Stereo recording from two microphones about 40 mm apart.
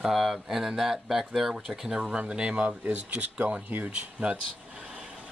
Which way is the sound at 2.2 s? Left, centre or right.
Right.